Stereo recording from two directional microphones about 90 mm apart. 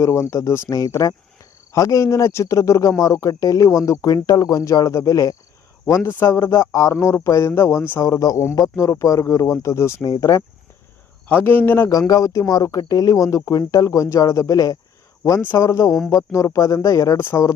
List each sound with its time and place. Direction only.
0.0 s speech: 30° left (ahead or behind)
6.1 s speech: 20° left (ahead or behind)
6.3 s speech: 35° left (ahead or behind)
8.0 s speech: 45° left (ahead or behind)
10.0 s speech: 45° left (ahead or behind)
11.3 s speech: 20° left (ahead or behind)
11.9 s speech: 40° left (ahead or behind)
15.2 s speech: 25° left (ahead or behind)
15.5 s speech: 35° left (ahead or behind)
17.2 s speech: 25° left (ahead or behind)